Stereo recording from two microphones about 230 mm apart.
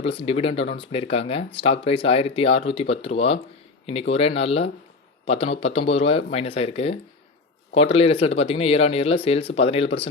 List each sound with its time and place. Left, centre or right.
0.0 s speech: left